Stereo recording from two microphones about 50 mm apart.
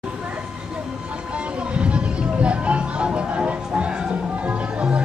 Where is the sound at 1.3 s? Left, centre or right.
Right.